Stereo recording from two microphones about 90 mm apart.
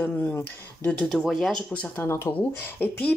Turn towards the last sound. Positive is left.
turn(degrees=15)  # may be behind; listen again after turning